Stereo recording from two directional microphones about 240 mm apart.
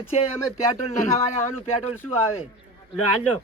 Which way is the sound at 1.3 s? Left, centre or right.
Left.